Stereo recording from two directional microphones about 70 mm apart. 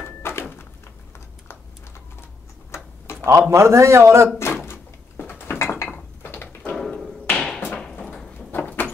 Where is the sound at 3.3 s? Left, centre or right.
Right.